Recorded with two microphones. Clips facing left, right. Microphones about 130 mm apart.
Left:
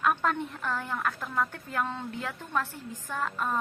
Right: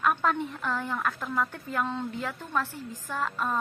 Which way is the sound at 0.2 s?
15° right (ahead or behind).